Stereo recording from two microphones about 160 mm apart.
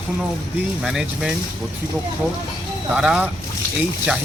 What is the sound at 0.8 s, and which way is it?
Speech, 5° right (ahead or behind).